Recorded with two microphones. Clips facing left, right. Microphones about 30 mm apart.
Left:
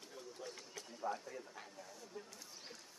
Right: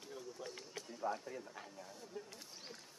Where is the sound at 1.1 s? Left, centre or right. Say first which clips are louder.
Right 1 dB; right.